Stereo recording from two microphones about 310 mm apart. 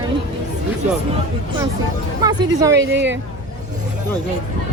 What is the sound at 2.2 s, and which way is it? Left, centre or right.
Speech, centre.